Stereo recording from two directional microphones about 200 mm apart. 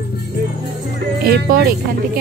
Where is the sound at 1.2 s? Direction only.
50° right (ahead or behind).